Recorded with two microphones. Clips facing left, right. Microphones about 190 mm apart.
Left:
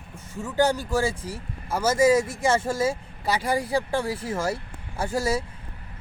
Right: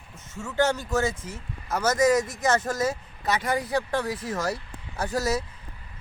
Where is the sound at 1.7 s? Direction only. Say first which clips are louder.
Left 1 dB; 10° left (ahead or behind).